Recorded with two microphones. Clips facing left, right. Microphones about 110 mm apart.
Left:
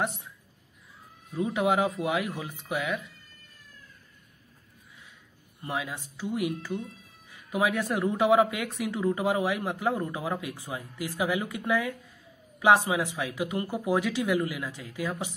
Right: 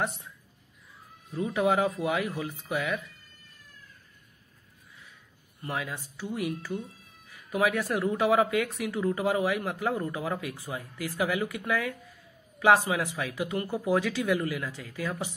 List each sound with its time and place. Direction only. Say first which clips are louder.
1.3 s speech: even; 20° left (ahead or behind)
5.6 s speech: left 1 dB; 20° left (ahead or behind)